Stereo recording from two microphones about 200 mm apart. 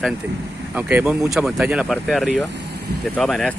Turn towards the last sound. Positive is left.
turn(degrees=0)  # may be behind; listen again after turning